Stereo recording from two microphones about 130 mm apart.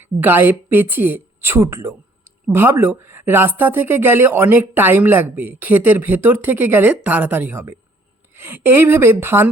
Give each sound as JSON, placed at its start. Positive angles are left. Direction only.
{"t": 0.2, "sound": "speech", "side_deg": -15}